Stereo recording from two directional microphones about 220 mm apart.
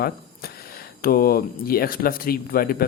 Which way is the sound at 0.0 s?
45° left (ahead or behind).